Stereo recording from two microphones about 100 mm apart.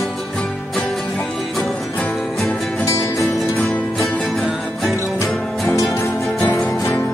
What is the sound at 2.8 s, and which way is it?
Music, 30° left (ahead or behind).